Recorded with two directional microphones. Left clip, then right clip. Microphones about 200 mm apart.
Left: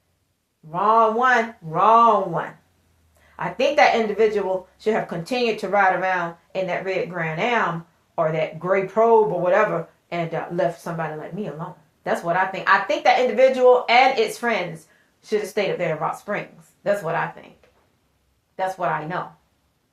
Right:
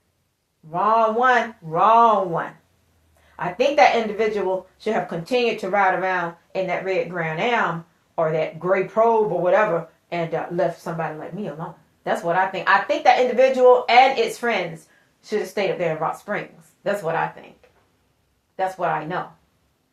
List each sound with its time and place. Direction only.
0.7 s speech: 35° left (ahead or behind)
12.0 s speech: 35° left (ahead or behind)
18.5 s speech: 30° left (ahead or behind)